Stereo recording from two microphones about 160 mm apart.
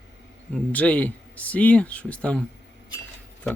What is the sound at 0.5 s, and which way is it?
Speech, 10° left (ahead or behind).